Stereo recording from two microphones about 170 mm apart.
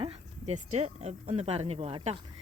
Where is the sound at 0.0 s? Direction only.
35° right (ahead or behind).